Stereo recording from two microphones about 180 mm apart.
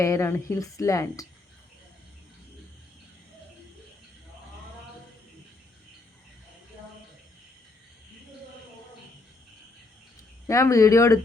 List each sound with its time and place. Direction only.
0.0 s speech: 15° left (ahead or behind)
10.4 s speech: 15° left (ahead or behind)